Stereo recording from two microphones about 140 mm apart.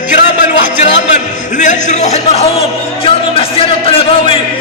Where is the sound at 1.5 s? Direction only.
60° left (ahead or behind); by 4.4 s 40° left (ahead or behind).